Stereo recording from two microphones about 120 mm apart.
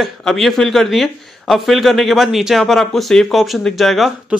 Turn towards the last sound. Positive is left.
turn(degrees=0)  # may be behind; listen again after turning